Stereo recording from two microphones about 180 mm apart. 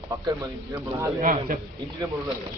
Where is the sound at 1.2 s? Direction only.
45° right (ahead or behind).